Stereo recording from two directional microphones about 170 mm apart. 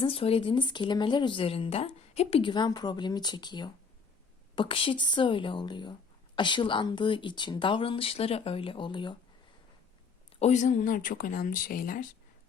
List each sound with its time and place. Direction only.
0.0 s speech: 35° left (ahead or behind)
10.4 s speech: 45° left (ahead or behind)